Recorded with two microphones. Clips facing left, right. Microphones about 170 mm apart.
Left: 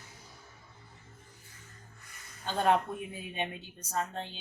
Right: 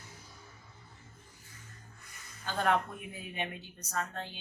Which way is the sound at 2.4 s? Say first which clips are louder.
Left 3 dB; 25° left (ahead or behind).